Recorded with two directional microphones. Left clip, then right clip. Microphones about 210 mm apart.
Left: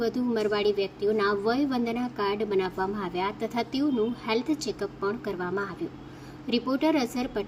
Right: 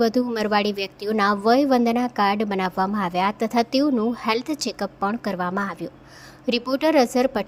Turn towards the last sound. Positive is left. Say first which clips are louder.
# right 10 dB
turn(degrees=-45)  # may be behind; listen again after turning